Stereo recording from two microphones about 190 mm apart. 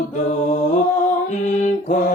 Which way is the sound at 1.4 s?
40° left (ahead or behind).